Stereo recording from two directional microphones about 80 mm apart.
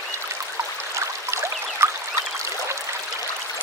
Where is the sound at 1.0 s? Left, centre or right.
Right.